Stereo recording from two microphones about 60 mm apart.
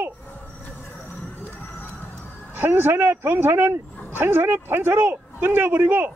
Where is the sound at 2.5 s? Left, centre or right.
Right.